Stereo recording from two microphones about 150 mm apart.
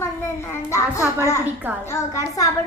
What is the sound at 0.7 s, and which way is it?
A child's voice, 20° left (ahead or behind).